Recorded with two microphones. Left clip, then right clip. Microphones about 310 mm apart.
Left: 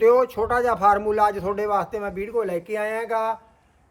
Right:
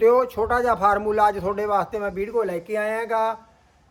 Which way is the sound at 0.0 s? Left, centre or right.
Centre.